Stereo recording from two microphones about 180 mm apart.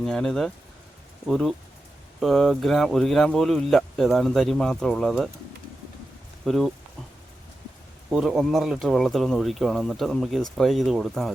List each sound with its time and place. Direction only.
0.0 s speech: 5° left (ahead or behind)
6.4 s speech: centre (ahead or behind)
8.1 s speech: centre (ahead or behind)